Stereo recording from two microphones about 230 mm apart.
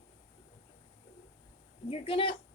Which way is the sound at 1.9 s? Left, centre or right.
Left.